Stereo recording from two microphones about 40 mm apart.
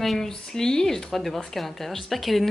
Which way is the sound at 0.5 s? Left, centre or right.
Centre.